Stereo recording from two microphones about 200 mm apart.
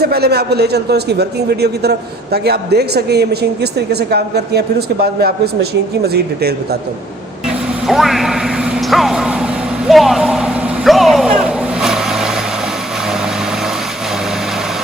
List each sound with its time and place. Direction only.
0.0 s a man's voice: 50° right (ahead or behind)
7.9 s vehicle: centre (ahead or behind)